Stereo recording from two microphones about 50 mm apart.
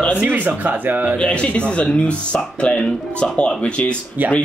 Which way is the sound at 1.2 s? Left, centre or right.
Left.